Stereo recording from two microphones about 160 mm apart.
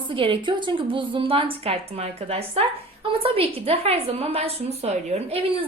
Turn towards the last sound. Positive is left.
turn(degrees=-40)  # may be behind; listen again after turning